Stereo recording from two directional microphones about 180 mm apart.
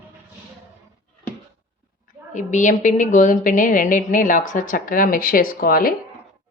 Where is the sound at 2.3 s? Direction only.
45° left (ahead or behind).